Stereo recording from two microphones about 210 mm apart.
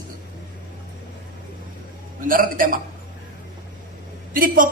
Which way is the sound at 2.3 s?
40° right (ahead or behind).